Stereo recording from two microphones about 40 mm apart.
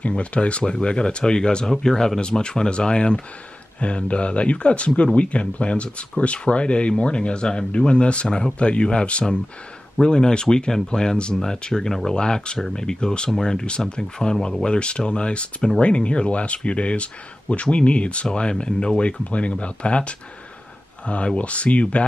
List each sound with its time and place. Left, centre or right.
0.1 s speech: left